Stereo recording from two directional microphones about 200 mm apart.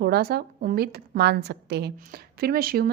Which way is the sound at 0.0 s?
50° right (ahead or behind).